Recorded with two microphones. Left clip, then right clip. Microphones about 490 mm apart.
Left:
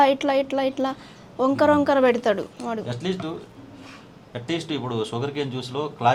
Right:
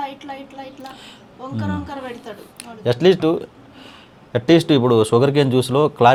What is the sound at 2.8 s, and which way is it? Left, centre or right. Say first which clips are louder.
Speech: right 14 dB; right.